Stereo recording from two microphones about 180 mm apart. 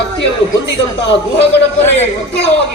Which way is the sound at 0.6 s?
75° left (ahead or behind).